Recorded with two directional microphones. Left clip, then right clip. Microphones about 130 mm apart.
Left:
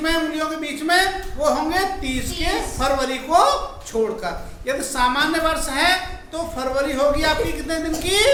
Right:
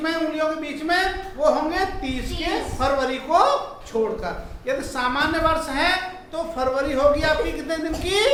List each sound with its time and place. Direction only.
0.0 s a man's voice: 20° left (ahead or behind)